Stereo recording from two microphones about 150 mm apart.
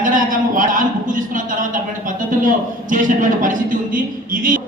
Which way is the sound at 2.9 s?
60° right (ahead or behind).